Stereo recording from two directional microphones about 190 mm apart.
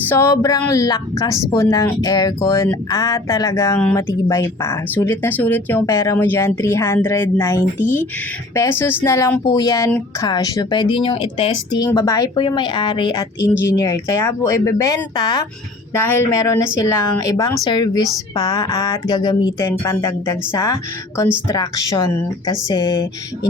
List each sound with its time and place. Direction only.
0.0 s speech: 10° left (ahead or behind)